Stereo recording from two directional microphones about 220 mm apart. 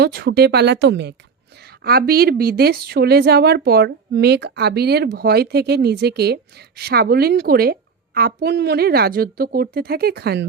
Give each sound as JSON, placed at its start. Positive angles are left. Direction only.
{"t": 0.0, "sound": "a woman's voice", "side_deg": -45}